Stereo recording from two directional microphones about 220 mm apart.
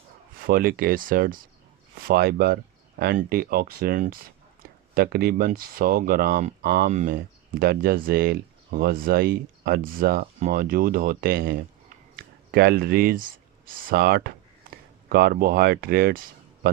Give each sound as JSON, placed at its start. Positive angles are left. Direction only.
{"t": 0.4, "sound": "speech", "side_deg": -40}